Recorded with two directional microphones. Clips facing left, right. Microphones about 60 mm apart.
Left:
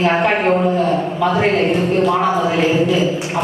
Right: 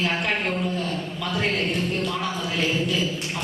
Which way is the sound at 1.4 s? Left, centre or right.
Left.